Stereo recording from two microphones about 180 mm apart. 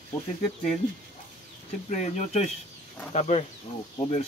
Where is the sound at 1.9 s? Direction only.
40° left (ahead or behind).